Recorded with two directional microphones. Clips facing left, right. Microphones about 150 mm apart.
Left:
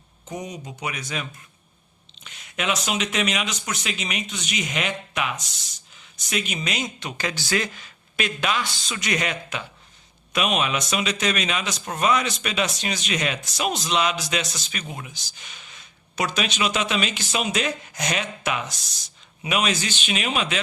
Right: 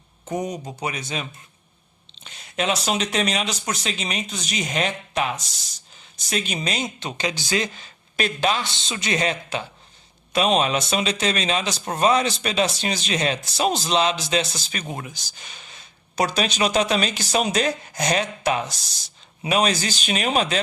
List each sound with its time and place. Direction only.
0.3 s speech: 45° right (ahead or behind)